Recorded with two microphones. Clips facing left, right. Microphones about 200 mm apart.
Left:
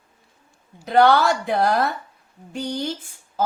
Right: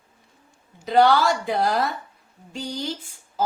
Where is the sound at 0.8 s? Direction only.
60° left (ahead or behind).